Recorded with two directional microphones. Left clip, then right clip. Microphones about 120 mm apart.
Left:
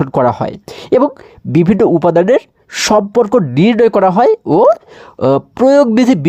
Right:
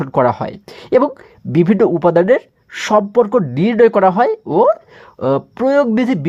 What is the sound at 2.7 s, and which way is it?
Speech, 50° left (ahead or behind).